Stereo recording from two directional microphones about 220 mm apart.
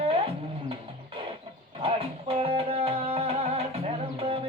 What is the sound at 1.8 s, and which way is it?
Music, 25° right (ahead or behind).